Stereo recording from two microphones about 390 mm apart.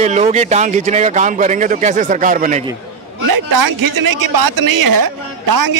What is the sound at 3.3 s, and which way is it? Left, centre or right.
A woman's voice, right.